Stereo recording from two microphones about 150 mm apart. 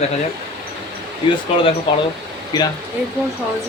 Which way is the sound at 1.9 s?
35° left (ahead or behind).